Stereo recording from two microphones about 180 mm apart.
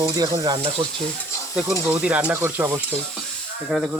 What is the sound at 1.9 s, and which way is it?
Speech, 5° right (ahead or behind).